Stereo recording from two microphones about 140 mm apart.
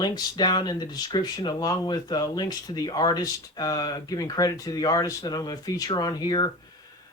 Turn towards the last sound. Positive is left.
turn(degrees=30)  # may be behind; listen again after turning